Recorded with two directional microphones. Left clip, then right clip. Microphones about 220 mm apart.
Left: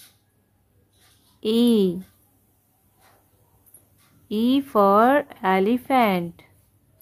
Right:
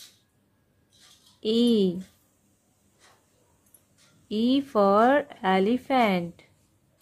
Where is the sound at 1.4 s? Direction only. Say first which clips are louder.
Left 3 dB; 10° left (ahead or behind).